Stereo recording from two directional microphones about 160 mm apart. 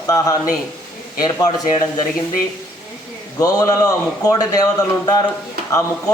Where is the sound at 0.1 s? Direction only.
20° left (ahead or behind).